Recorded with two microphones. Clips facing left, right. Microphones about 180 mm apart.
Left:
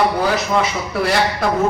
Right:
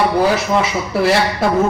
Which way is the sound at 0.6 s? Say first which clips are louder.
Right 2 dB; 5° right (ahead or behind).